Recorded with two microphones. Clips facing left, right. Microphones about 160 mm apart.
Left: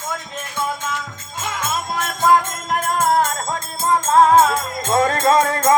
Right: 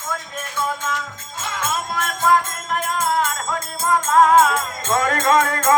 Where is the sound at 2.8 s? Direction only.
45° left (ahead or behind).